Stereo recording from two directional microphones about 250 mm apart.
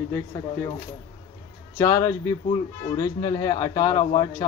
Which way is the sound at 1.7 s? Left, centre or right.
Centre.